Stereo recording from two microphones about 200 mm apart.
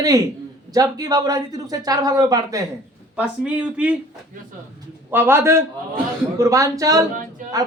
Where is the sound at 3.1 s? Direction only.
5° right (ahead or behind).